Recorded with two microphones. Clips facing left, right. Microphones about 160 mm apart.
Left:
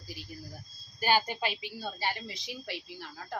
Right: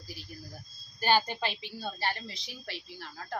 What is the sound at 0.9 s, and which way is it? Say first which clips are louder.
A woman's voice: right 1 dB; 10° left (ahead or behind).